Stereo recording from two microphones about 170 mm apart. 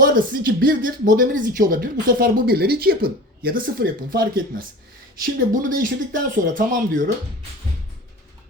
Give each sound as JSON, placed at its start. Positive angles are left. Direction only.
{"t": 0.0, "sound": "speech", "side_deg": -60}